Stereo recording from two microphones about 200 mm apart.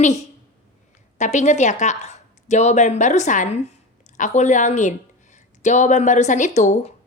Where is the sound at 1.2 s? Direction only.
35° left (ahead or behind).